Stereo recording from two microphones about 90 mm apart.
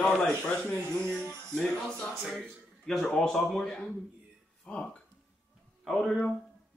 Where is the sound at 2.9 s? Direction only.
5° left (ahead or behind).